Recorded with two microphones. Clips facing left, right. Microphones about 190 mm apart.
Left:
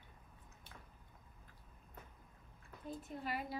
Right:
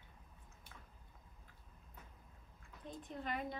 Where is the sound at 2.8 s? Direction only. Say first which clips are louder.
Left 1 dB; 5° left (ahead or behind).